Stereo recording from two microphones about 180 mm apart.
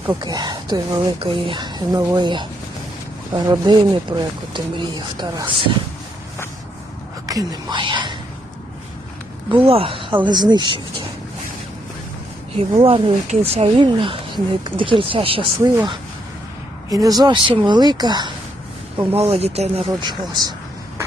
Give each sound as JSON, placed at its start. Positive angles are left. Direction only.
{"t": 0.2, "sound": "speech", "side_deg": -25}
{"t": 7.3, "sound": "speech", "side_deg": -20}
{"t": 9.5, "sound": "speech", "side_deg": -30}
{"t": 12.5, "sound": "speech", "side_deg": -30}
{"t": 16.9, "sound": "speech", "side_deg": -20}
{"t": 19.1, "sound": "speech", "side_deg": -35}
{"t": 19.9, "sound": "speech", "side_deg": -25}